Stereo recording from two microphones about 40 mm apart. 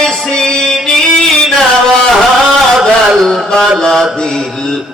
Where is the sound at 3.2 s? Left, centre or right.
Centre.